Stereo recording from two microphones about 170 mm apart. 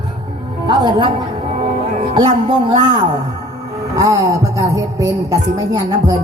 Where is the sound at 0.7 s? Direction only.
25° right (ahead or behind).